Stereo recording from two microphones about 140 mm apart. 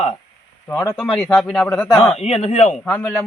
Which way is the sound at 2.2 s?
45° left (ahead or behind).